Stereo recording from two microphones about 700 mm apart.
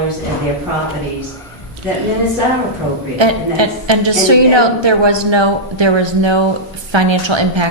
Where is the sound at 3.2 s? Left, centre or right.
Right.